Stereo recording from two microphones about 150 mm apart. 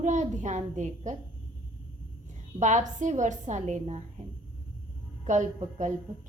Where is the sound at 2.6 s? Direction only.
55° right (ahead or behind).